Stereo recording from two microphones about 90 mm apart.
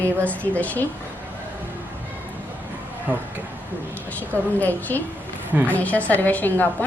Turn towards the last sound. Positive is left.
turn(degrees=20)  # may be behind; listen again after turning